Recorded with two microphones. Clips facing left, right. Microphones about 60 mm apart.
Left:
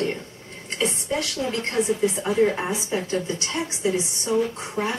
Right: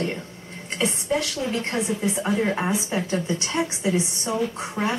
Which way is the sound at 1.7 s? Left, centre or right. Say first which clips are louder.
Left 3 dB; right.